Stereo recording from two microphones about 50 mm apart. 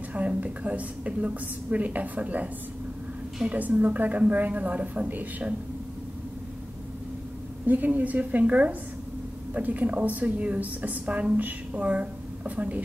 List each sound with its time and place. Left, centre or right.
0.1 s a woman's voice: right
7.6 s a woman's voice: right